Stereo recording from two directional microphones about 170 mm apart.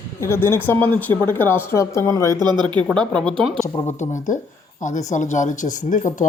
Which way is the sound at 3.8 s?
45° left (ahead or behind).